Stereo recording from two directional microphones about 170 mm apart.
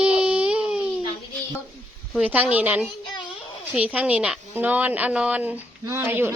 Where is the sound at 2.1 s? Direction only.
10° right (ahead or behind).